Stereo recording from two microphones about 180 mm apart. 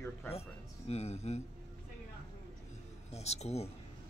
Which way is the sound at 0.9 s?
35° left (ahead or behind).